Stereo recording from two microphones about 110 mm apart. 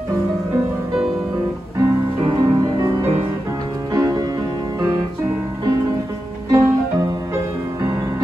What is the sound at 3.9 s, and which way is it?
Music, 30° right (ahead or behind).